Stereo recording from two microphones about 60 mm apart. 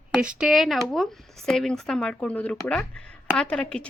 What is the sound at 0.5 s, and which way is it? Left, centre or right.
Speech, centre.